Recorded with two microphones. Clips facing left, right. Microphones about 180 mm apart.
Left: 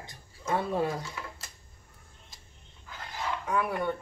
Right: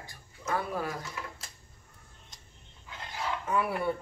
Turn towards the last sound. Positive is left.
turn(degrees=-5)  # may be behind; listen again after turning